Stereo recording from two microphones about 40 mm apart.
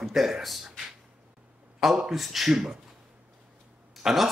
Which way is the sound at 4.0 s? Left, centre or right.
Centre.